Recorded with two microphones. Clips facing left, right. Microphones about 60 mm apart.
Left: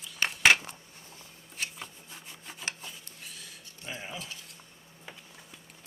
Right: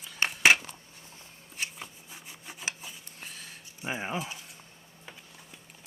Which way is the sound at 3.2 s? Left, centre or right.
Right.